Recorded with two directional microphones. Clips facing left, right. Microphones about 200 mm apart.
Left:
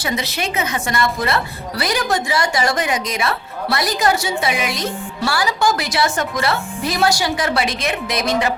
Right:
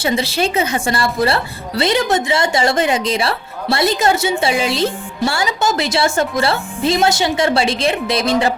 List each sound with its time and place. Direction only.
0.0 s a woman's voice: 30° right (ahead or behind)